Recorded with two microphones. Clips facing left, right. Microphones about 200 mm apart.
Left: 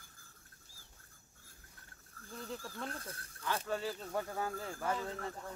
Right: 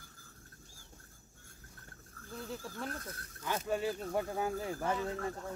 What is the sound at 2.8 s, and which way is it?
Speech, 30° left (ahead or behind).